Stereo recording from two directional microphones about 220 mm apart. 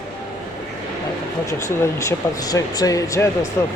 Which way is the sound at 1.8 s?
15° left (ahead or behind).